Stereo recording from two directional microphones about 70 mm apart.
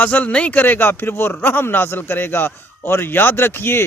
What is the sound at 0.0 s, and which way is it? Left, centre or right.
Speech, centre.